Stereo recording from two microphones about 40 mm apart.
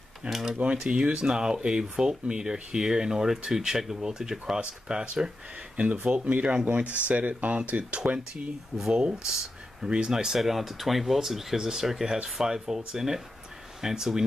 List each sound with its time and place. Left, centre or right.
0.3 s speech: centre
0.8 s speech: right
9.2 s a sound: centre
9.8 s speech: right
10.1 s speech: centre